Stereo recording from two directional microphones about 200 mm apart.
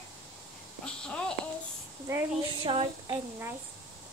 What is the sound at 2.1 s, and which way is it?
Speech, 15° right (ahead or behind).